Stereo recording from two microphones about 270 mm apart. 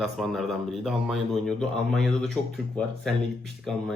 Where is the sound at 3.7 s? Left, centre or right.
Centre.